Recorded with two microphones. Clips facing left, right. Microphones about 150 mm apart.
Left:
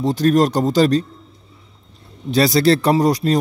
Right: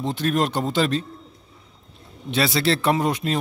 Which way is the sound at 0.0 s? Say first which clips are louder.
Left 7 dB; 40° left (ahead or behind).